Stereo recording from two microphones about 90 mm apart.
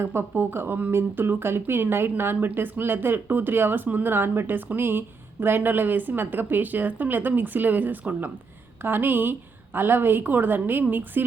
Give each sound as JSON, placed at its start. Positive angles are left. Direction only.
{"t": 0.0, "sound": "speech", "side_deg": -25}